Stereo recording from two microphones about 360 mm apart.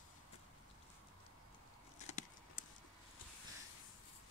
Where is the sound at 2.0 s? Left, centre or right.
Centre.